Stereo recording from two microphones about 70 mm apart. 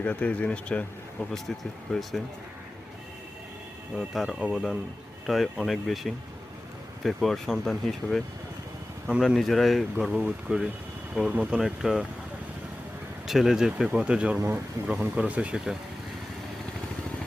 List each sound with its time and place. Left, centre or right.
0.0 s speech: centre
1.3 s speech: centre
3.9 s speech: centre
9.1 s speech: centre
10.1 s speech: centre
13.2 s speech: centre